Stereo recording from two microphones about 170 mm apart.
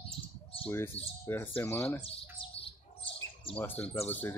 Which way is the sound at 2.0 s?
35° left (ahead or behind).